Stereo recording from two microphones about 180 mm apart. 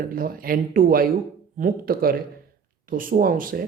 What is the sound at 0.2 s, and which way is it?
Speech, 55° right (ahead or behind).